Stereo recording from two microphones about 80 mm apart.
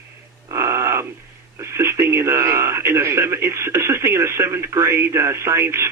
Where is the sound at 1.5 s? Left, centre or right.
Right.